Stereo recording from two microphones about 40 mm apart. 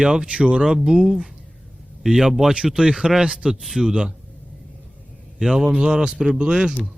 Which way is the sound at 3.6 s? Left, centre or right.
Centre.